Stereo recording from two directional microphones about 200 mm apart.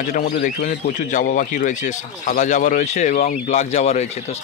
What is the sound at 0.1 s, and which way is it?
Speech, 45° left (ahead or behind).